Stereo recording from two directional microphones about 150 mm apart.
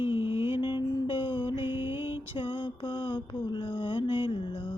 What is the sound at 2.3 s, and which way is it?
Mantra, 35° left (ahead or behind).